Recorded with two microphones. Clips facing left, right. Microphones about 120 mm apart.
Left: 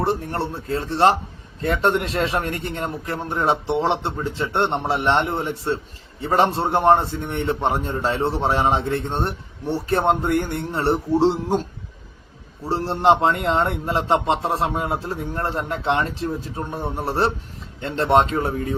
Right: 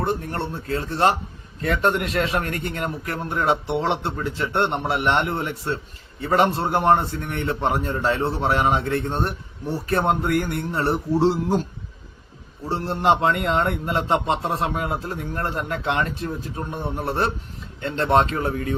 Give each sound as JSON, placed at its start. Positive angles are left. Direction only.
{"t": 0.0, "sound": "a man's voice", "side_deg": 30}
{"t": 12.6, "sound": "a man's voice", "side_deg": 30}